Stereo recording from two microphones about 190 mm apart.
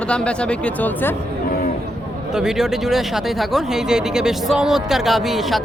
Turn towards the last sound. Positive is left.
turn(degrees=0)  # may be behind; listen again after turning